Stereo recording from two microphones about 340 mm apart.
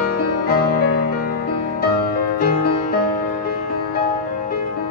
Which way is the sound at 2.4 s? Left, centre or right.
Left.